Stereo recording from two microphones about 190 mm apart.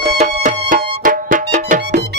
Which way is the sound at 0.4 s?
45° right (ahead or behind).